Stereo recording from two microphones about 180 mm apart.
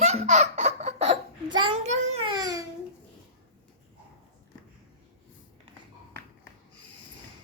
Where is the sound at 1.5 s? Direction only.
25° right (ahead or behind).